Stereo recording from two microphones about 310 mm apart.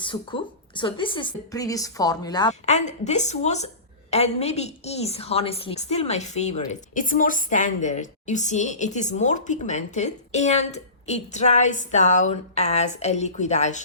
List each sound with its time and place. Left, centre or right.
0.0 s a woman's voice: centre